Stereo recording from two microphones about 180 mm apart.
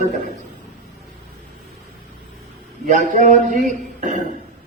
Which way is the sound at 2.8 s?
45° right (ahead or behind).